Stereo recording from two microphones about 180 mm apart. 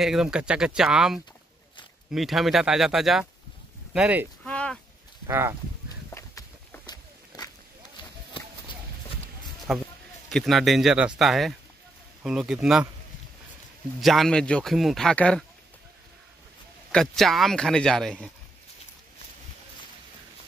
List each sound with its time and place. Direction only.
0.0 s a man's voice: 5° right (ahead or behind)
4.5 s a sound: 5° left (ahead or behind)
5.2 s speech: 15° right (ahead or behind)
6.1 s walk: 15° left (ahead or behind)
9.7 s a man's voice: centre (ahead or behind)
14.0 s a man's voice: centre (ahead or behind)
16.9 s a man's voice: centre (ahead or behind)